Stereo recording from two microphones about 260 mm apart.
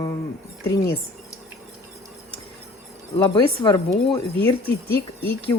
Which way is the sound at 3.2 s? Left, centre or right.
Centre.